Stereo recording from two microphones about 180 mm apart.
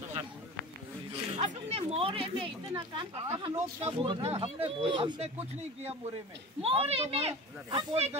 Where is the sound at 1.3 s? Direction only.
35° right (ahead or behind).